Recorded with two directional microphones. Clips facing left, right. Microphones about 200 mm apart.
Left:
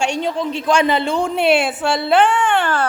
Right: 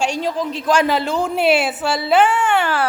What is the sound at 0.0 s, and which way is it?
A woman's voice, centre (ahead or behind).